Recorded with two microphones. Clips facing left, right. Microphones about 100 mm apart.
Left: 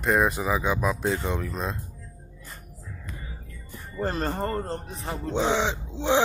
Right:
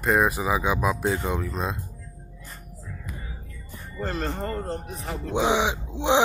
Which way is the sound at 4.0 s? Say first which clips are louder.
Left 2 dB; 45° left (ahead or behind).